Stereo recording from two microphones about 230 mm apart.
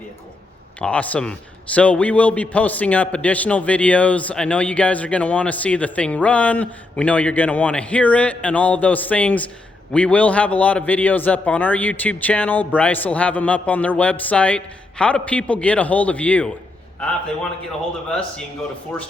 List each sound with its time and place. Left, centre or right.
0.8 s a man's voice: centre